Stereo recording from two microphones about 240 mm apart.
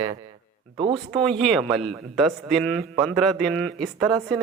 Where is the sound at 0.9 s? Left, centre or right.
Centre.